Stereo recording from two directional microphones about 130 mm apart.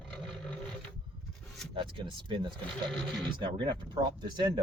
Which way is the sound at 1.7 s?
40° right (ahead or behind).